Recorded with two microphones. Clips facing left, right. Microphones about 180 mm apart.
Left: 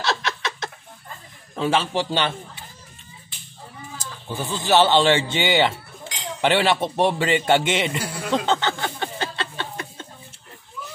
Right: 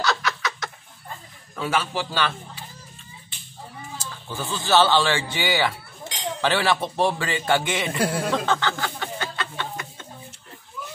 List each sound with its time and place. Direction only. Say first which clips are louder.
0.0 s chicken: even; 25° left (ahead or behind)
1.5 s speech: left 4 dB; 25° left (ahead or behind)
4.0 s speech: left 3 dB; 20° left (ahead or behind)
8.3 s a sound: left 2 dB; 20° left (ahead or behind)